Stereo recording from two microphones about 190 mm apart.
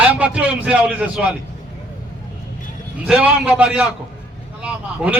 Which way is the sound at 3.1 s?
5° right (ahead or behind).